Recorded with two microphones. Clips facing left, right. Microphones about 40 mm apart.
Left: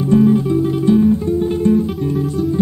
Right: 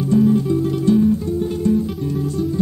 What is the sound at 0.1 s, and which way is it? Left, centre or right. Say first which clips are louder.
Music: left 3 dB; left.